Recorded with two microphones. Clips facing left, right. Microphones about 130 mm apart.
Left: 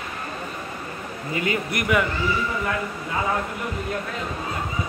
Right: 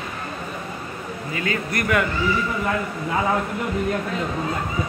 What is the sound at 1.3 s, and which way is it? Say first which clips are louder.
Speech: left 1 dB; 20° left (ahead or behind).